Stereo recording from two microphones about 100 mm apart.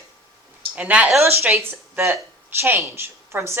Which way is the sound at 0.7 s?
10° right (ahead or behind).